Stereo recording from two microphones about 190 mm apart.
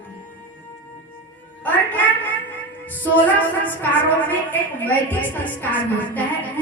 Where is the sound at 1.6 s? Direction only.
10° left (ahead or behind).